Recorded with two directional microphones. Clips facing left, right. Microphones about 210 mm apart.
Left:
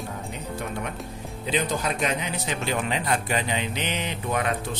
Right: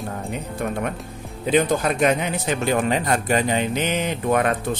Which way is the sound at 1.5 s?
60° right (ahead or behind).